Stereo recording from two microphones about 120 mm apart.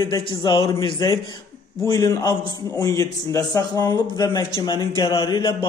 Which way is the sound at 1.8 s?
30° left (ahead or behind).